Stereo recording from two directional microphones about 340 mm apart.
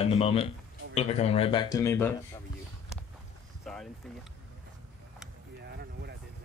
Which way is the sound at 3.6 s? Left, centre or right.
Centre.